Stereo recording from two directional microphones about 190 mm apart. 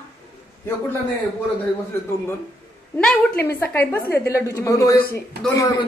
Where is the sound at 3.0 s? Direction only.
5° left (ahead or behind).